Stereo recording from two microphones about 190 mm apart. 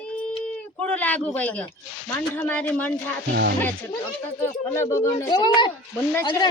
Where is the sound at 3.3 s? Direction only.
60° right (ahead or behind).